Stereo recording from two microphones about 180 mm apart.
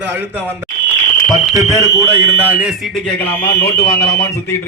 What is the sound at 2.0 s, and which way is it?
Speech, 10° right (ahead or behind).